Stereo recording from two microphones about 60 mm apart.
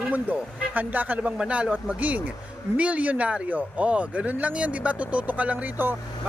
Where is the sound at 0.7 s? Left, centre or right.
Right.